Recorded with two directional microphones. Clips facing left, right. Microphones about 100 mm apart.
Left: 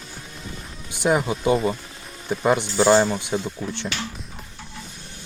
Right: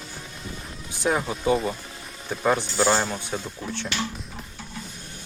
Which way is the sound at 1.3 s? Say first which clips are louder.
Left 3 dB; 5° left (ahead or behind).